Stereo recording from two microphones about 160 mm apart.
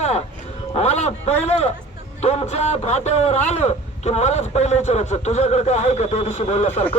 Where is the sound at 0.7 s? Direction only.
45° left (ahead or behind).